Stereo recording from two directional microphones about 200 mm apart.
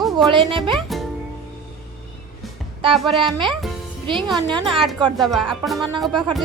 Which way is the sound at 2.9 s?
Centre (ahead or behind).